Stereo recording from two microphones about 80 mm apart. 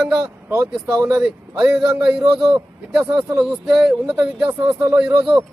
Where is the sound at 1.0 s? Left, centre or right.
Right.